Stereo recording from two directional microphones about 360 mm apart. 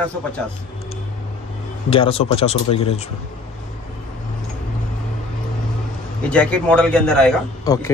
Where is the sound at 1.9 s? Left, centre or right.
Centre.